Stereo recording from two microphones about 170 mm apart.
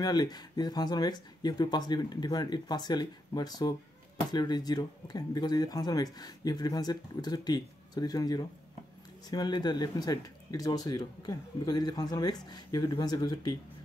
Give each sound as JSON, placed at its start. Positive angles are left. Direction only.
{"t": 0.0, "sound": "speech", "side_deg": 25}